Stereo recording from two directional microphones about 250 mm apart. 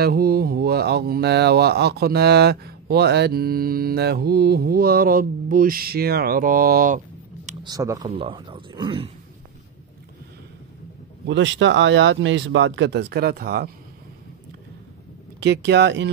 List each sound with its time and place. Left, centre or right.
0.0 s speech: right
7.6 s speech: centre
11.2 s speech: right
15.4 s speech: right